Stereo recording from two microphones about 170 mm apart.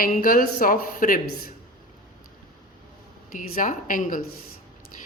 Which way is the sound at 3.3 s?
50° left (ahead or behind).